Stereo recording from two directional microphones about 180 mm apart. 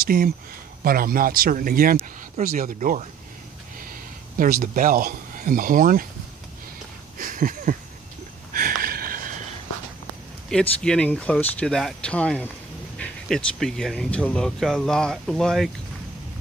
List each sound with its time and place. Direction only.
0.0 s speech: 55° right (ahead or behind)
4.4 s speech: 50° right (ahead or behind)
7.2 s a sound: 50° right (ahead or behind)
10.5 s speech: 5° left (ahead or behind)